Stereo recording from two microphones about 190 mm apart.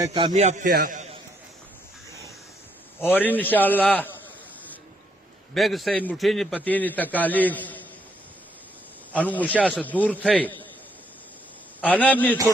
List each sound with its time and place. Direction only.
0.0 s a man's voice: 20° right (ahead or behind)
0.3 s a man's voice: 40° right (ahead or behind)
3.0 s a man's voice: 10° left (ahead or behind)
5.5 s a man's voice: centre (ahead or behind)
9.1 s a man's voice: 10° left (ahead or behind)
11.9 s a man's voice: 10° left (ahead or behind)